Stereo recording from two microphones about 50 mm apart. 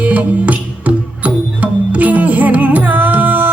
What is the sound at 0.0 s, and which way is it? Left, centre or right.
Music, right.